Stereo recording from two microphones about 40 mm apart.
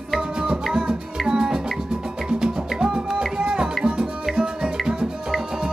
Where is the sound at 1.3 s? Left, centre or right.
Centre.